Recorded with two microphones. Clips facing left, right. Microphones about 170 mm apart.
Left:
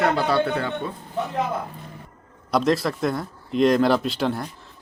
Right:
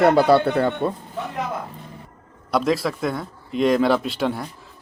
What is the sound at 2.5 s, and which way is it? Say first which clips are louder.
Speech: even; centre (ahead or behind).